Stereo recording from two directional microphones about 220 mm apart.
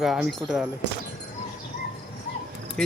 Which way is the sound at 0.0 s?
Centre (ahead or behind).